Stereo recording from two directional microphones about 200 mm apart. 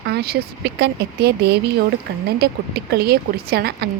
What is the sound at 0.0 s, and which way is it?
A woman's voice, 55° right (ahead or behind).